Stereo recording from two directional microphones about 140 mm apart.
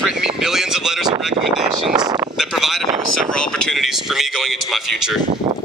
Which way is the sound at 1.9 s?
25° right (ahead or behind).